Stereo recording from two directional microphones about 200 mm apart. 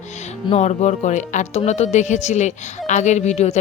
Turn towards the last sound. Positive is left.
turn(degrees=35)  # may be behind; listen again after turning